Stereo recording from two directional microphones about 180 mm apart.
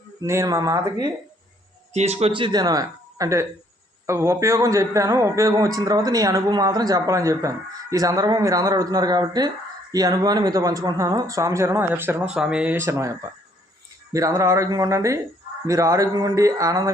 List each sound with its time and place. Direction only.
0.2 s a man's voice: 15° right (ahead or behind)
1.9 s a man's voice: 40° right (ahead or behind); by 16.9 s 20° right (ahead or behind)